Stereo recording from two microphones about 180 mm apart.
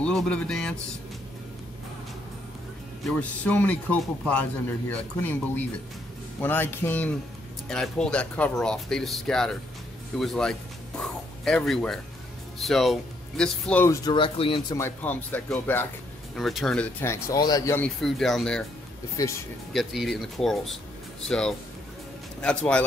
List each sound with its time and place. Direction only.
0.0 s speech: 5° left (ahead or behind)
3.1 s speech: 10° left (ahead or behind)
14.0 s speech: 30° left (ahead or behind)
14.8 s speech: 10° left (ahead or behind)
17.7 s speech: 5° left (ahead or behind)
19.1 s speech: 15° left (ahead or behind)
19.7 s speech: centre (ahead or behind)